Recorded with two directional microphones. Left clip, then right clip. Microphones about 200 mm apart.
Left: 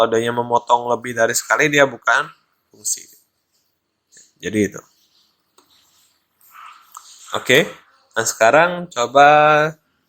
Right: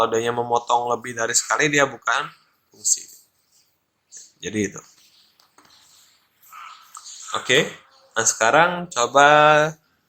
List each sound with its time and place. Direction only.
0.0 s speech: 20° left (ahead or behind)
4.4 s speech: 20° left (ahead or behind)
7.3 s speech: 25° left (ahead or behind)